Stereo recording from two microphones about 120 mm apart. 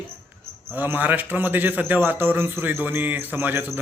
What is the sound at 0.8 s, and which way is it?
Speech, 15° right (ahead or behind).